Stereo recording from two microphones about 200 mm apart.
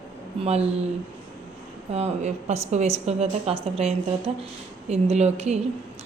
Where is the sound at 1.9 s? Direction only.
30° right (ahead or behind).